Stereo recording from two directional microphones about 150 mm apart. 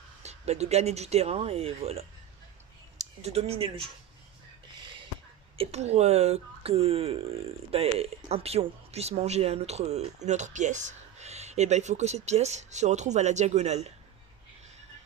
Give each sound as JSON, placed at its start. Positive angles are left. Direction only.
{"t": 0.2, "sound": "speech", "side_deg": -45}
{"t": 5.5, "sound": "speech", "side_deg": -45}